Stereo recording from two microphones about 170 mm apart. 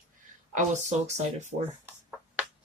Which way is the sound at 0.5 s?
45° right (ahead or behind).